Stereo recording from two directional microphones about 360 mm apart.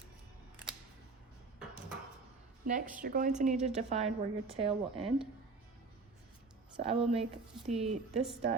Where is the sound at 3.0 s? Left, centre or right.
Right.